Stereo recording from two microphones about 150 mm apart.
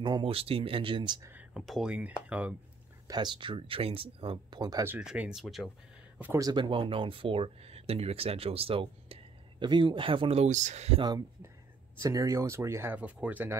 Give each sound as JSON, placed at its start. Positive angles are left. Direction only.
{"t": 0.0, "sound": "speech", "side_deg": -35}
{"t": 1.5, "sound": "speech", "side_deg": -5}
{"t": 3.1, "sound": "speech", "side_deg": -30}
{"t": 4.8, "sound": "speech", "side_deg": -10}
{"t": 6.1, "sound": "speech", "side_deg": -10}
{"t": 6.4, "sound": "speech", "side_deg": -30}
{"t": 11.0, "sound": "speech", "side_deg": -25}